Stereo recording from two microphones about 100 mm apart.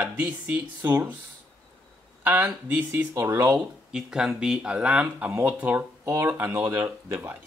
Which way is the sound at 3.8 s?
5° right (ahead or behind).